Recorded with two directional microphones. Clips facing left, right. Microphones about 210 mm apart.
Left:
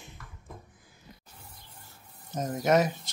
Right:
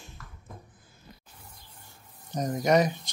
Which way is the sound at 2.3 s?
5° left (ahead or behind).